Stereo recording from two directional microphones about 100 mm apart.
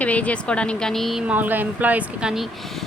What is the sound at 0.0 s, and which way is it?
A woman's voice, 15° left (ahead or behind).